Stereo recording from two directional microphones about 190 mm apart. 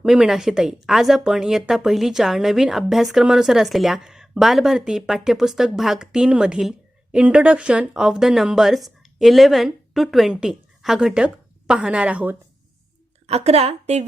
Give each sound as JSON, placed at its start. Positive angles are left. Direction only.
{"t": 0.0, "sound": "a woman's voice", "side_deg": -5}
{"t": 13.2, "sound": "a woman's voice", "side_deg": -35}